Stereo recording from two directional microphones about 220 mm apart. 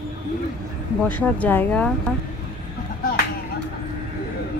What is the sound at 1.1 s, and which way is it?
Speech, 5° left (ahead or behind).